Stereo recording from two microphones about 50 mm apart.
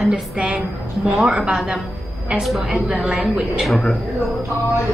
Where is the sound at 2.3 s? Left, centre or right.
Centre.